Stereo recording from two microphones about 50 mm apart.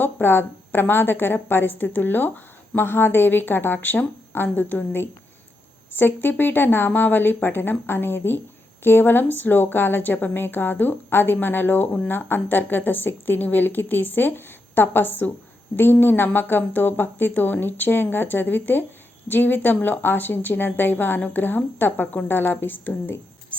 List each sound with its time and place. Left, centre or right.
0.0 s a woman's voice: left
6.0 s a woman's voice: left